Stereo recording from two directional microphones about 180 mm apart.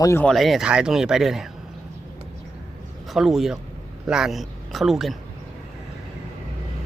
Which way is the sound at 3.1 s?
Centre (ahead or behind).